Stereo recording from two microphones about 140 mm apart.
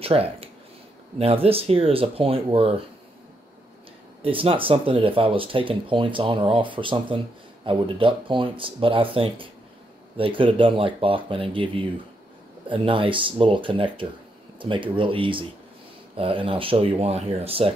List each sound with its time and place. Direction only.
0.0 s speech: 45° right (ahead or behind)
4.2 s speech: 40° right (ahead or behind)